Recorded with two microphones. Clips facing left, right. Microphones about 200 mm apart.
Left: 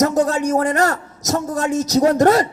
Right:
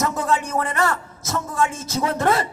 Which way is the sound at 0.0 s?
40° left (ahead or behind).